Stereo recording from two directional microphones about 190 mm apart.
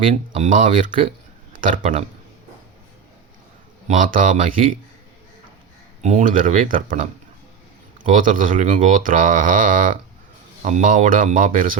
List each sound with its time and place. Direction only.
0.1 s speech: 40° right (ahead or behind)
3.8 s speech: 45° right (ahead or behind)
6.0 s speech: 40° right (ahead or behind)
8.0 s speech: 45° right (ahead or behind)